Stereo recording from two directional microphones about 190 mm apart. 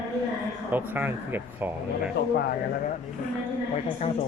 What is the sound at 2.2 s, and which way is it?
Speech, 60° left (ahead or behind).